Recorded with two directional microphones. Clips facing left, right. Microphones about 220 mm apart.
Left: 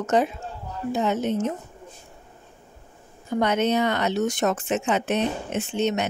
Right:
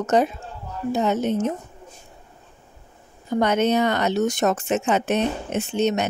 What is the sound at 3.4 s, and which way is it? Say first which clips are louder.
A woman's voice: right 2 dB; 45° right (ahead or behind).